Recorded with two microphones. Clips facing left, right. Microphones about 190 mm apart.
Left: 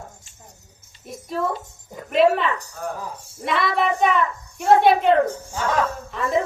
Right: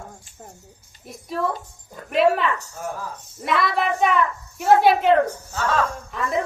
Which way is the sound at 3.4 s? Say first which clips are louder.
Left 1 dB; centre (ahead or behind).